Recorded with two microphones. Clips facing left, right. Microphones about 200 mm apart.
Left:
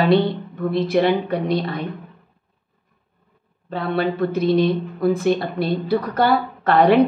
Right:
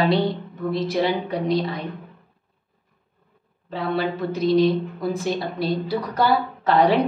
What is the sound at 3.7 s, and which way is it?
Speech, 55° left (ahead or behind).